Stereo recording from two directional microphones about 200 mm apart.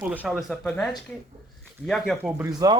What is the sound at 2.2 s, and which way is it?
Speech, 10° right (ahead or behind).